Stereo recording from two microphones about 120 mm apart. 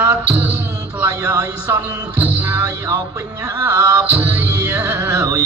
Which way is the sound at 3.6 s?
15° right (ahead or behind).